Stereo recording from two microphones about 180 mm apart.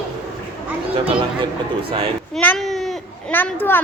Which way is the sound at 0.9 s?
30° right (ahead or behind).